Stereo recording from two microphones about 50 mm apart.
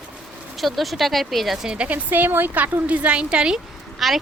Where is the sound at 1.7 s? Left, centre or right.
Right.